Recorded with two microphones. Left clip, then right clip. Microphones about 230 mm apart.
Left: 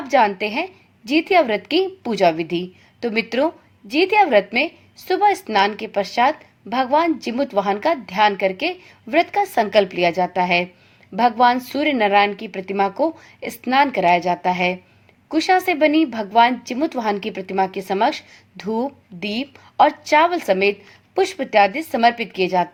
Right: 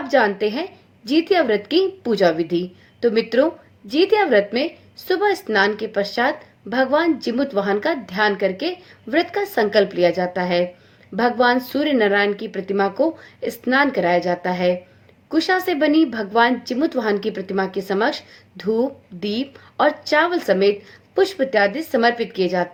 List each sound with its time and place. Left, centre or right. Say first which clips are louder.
0.2 s a woman's voice: left 2 dB; left